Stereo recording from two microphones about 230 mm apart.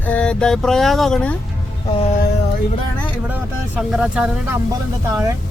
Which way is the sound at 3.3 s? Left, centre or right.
Centre.